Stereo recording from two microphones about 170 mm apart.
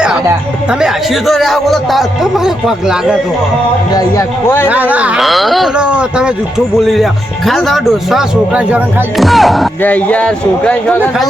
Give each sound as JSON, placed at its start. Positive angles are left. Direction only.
{"t": 0.7, "sound": "a man's voice", "side_deg": -5}
{"t": 3.9, "sound": "a man's voice", "side_deg": 20}
{"t": 4.7, "sound": "a man's voice", "side_deg": -10}